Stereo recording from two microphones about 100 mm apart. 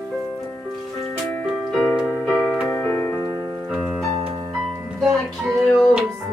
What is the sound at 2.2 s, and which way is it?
Music, 5° left (ahead or behind).